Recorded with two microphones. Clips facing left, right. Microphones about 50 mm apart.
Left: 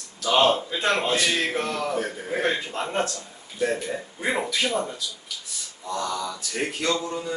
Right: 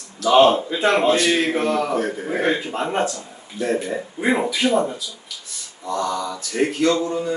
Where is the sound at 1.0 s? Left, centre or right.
Centre.